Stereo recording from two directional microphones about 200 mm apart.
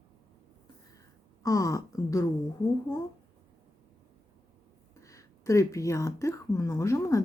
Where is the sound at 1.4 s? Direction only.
15° left (ahead or behind).